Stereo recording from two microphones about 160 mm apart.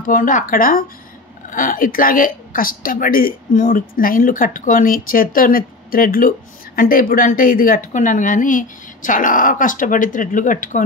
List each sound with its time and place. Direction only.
0.0 s a woman's voice: 55° left (ahead or behind)